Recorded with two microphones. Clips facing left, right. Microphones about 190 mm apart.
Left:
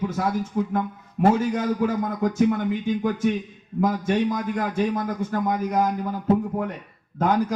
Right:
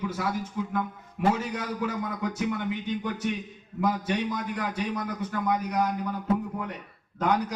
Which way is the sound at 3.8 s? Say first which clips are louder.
Left 5 dB; 45° left (ahead or behind).